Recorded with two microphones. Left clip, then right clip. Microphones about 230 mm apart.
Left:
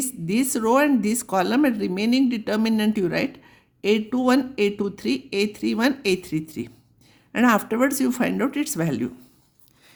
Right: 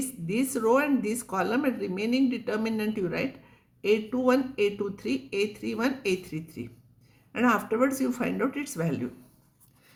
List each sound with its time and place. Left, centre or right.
0.0 s speech: left